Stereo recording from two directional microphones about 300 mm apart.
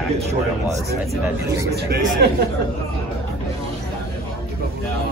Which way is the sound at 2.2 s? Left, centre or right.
Right.